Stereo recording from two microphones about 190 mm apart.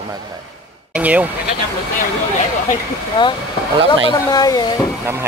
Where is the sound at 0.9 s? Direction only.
10° right (ahead or behind).